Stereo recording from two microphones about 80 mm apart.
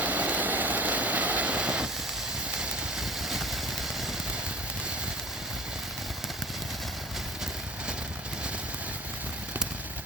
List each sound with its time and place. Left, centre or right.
0.0 s vehicle: right; by 3.6 s centre